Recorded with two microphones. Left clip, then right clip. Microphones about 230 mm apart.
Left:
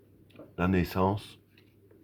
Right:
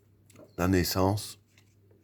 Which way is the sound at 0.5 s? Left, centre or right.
Right.